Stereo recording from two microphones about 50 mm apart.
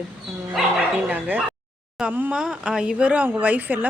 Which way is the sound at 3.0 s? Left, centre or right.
Right.